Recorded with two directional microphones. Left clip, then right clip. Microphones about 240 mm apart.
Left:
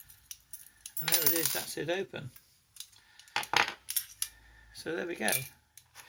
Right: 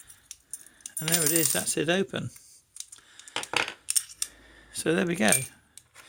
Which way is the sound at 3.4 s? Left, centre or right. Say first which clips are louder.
Even; centre.